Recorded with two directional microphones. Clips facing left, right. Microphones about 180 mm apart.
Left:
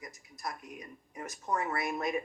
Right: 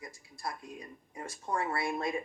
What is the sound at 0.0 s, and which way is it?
Speech, 30° right (ahead or behind).